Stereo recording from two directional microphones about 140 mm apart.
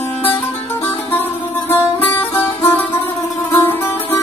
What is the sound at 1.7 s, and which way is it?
Music, 15° left (ahead or behind).